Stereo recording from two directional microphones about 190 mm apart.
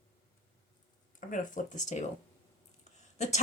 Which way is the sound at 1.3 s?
40° left (ahead or behind).